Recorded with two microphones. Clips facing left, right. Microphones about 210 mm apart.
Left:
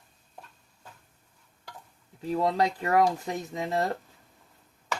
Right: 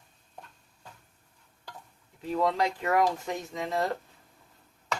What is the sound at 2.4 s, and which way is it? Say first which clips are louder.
Speech: left 1 dB; 35° left (ahead or behind).